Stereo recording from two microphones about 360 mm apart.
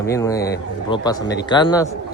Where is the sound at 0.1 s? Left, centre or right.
Centre.